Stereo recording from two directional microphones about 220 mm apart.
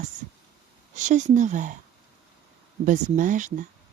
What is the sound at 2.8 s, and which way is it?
Speech, 35° right (ahead or behind).